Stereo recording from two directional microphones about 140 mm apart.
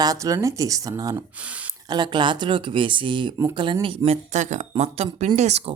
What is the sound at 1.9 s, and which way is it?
Speech, 30° right (ahead or behind).